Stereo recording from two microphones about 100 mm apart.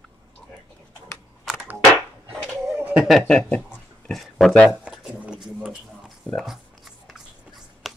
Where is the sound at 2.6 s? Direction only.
25° right (ahead or behind).